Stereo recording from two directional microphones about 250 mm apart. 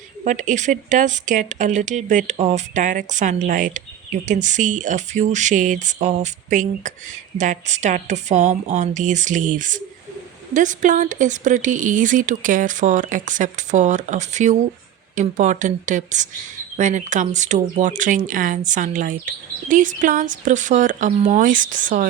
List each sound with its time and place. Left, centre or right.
0.3 s speech: right